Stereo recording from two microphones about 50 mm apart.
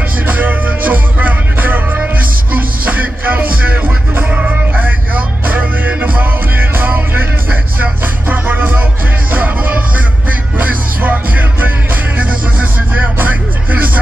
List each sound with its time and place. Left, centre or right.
0.3 s music: right